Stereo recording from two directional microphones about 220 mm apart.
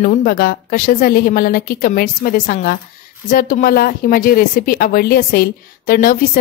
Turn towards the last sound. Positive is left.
turn(degrees=40)  # may be behind; listen again after turning